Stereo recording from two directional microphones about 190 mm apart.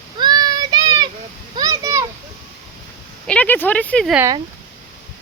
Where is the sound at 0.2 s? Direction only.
20° right (ahead or behind).